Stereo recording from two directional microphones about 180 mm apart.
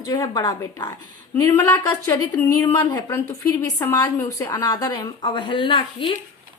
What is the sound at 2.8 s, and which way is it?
A woman's voice, 20° left (ahead or behind).